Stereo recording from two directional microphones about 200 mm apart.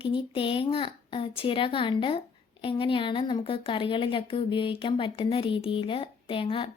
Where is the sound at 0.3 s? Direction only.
25° left (ahead or behind).